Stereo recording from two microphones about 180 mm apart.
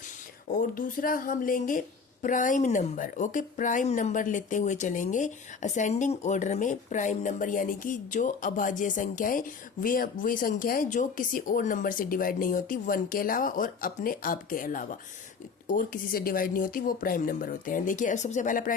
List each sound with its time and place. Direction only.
0.5 s speech: 50° left (ahead or behind)